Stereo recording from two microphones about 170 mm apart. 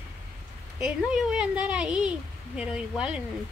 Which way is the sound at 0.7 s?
5° right (ahead or behind).